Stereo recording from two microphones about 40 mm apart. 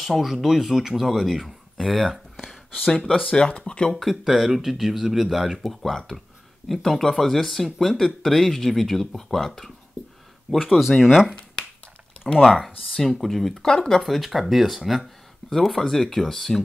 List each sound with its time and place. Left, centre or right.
0.0 s speech: centre
2.4 s a sound: centre
3.3 s speech: left
3.9 s speech: centre
10.7 s speech: centre
14.0 s speech: centre